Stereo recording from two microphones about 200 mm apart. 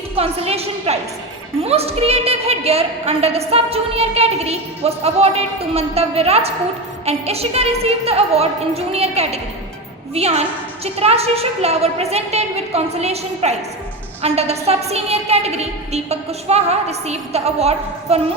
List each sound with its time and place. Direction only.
0.2 s a woman's voice: 30° right (ahead or behind)